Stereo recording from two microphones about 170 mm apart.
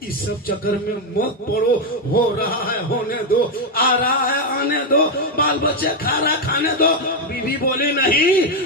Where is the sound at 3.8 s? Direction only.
60° left (ahead or behind).